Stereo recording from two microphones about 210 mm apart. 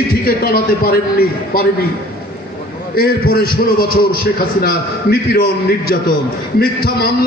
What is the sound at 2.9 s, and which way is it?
A man's voice, 45° left (ahead or behind).